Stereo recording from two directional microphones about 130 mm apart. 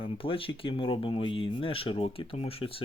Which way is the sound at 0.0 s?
45° left (ahead or behind).